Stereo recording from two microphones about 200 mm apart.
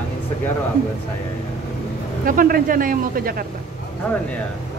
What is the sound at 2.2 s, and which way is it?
Speech, 45° right (ahead or behind).